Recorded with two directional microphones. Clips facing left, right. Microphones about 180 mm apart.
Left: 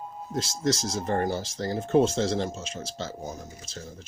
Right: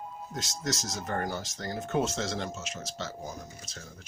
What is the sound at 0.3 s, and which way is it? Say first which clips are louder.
Speech: left 8 dB; 30° left (ahead or behind).